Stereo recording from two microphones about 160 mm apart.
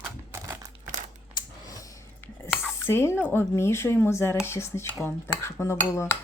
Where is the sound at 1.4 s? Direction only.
20° left (ahead or behind).